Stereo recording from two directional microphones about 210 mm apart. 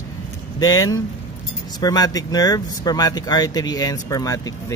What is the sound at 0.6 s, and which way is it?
Speech, 15° left (ahead or behind).